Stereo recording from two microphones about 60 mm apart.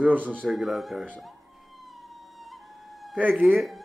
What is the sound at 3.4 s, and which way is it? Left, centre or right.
Speech, centre.